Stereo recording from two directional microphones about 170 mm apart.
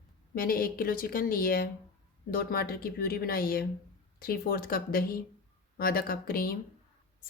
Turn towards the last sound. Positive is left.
turn(degrees=60)  # may be behind; listen again after turning